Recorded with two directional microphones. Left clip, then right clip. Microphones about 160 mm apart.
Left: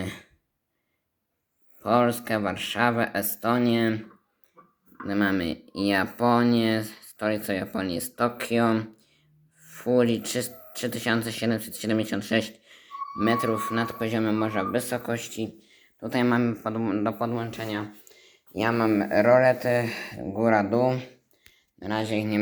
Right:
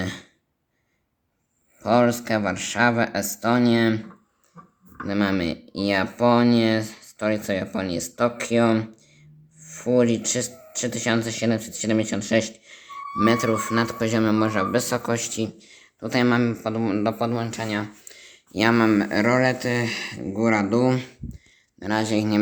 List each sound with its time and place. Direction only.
0.0 s throat clearing: 10° right (ahead or behind)
1.8 s speech: 10° right (ahead or behind)
5.0 s speech: 10° right (ahead or behind)
20.8 s speech: 35° right (ahead or behind)
21.8 s speech: 20° right (ahead or behind)